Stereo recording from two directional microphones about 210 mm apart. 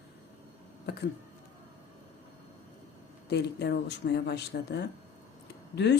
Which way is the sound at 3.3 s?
55° left (ahead or behind).